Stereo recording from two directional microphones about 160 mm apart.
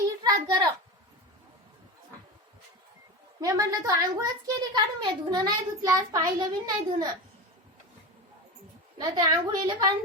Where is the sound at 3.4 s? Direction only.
20° right (ahead or behind).